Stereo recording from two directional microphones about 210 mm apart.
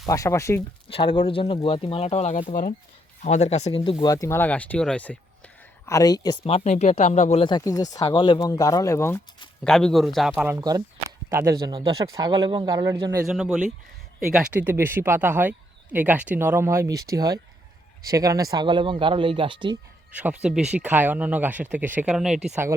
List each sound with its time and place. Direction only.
0.0 s speech: 15° left (ahead or behind)
0.9 s speech: 25° left (ahead or behind); by 10.6 s 5° right (ahead or behind)
10.6 s speech: 20° right (ahead or behind)
13.2 s speech: centre (ahead or behind); by 19.7 s 25° right (ahead or behind)
20.1 s speech: 5° right (ahead or behind)